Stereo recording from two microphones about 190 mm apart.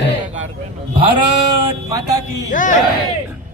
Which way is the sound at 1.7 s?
15° right (ahead or behind).